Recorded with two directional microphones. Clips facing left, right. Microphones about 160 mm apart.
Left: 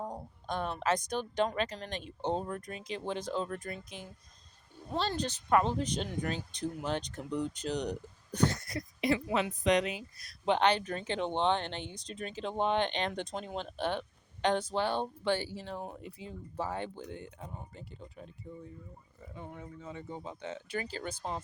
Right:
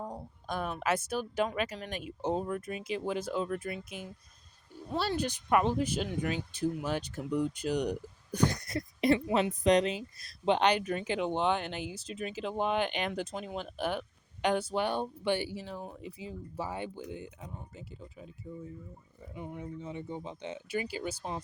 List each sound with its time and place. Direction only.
0.4 s speech: 10° right (ahead or behind)
9.0 s speech: 35° right (ahead or behind)
10.2 s speech: 20° right (ahead or behind); by 18.3 s 5° right (ahead or behind)
19.3 s speech: 15° right (ahead or behind)